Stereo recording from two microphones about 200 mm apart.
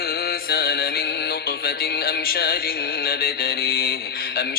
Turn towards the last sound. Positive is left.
turn(degrees=50)  # may be behind; listen again after turning